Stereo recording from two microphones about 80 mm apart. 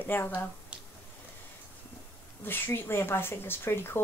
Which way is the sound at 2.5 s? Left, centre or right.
Left.